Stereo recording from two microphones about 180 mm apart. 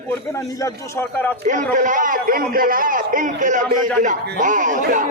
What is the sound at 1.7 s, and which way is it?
A man's voice, 45° right (ahead or behind).